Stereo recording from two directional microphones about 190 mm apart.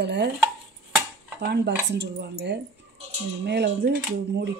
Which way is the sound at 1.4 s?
60° right (ahead or behind).